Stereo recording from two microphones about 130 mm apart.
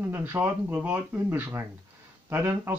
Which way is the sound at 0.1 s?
15° right (ahead or behind).